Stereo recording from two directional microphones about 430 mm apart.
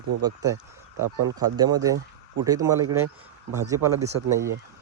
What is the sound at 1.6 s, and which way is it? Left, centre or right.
Speech, centre.